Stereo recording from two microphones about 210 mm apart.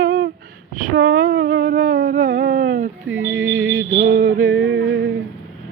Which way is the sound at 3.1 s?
70° right (ahead or behind).